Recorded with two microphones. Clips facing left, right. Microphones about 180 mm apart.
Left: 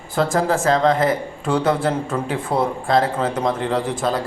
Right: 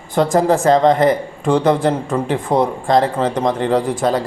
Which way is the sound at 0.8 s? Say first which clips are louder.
Right 4 dB; centre (ahead or behind).